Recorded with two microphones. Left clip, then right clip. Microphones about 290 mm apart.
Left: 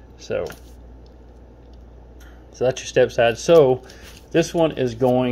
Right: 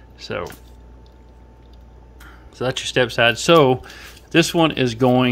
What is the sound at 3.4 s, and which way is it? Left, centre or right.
Speech, right.